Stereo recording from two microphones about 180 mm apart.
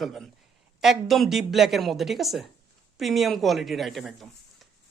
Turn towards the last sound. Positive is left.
turn(degrees=0)  # may be behind; listen again after turning